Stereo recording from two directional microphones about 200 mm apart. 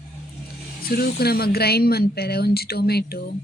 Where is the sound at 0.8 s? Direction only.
50° left (ahead or behind).